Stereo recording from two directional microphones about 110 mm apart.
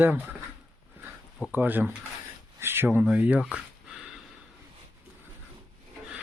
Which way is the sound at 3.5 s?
5° right (ahead or behind).